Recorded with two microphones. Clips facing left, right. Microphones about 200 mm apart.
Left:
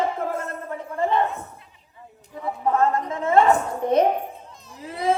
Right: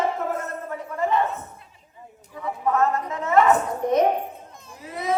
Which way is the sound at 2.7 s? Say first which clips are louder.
Left 1 dB; 30° left (ahead or behind).